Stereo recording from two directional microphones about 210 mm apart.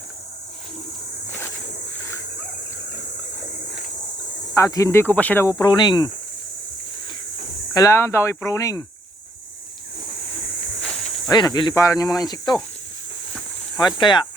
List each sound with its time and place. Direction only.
4.5 s speech: 15° left (ahead or behind)
7.7 s speech: 15° left (ahead or behind)
11.3 s speech: 20° left (ahead or behind)
13.7 s speech: 20° left (ahead or behind)